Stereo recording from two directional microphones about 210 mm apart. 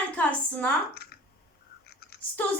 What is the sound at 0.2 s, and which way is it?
Speech, 5° left (ahead or behind).